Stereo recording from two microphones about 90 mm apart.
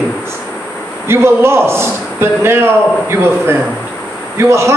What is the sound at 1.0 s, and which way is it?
A man's voice, 30° right (ahead or behind).